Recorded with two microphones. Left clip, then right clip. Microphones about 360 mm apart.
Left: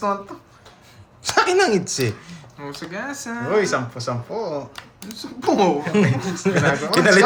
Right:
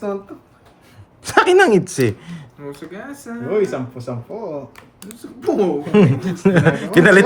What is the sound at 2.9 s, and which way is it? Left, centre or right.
Speech, left.